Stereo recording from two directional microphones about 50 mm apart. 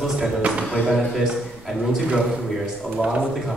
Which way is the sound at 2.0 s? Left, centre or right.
Centre.